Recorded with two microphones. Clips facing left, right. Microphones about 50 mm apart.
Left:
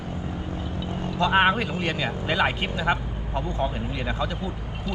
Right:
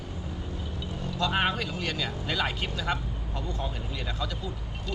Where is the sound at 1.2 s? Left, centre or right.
Left.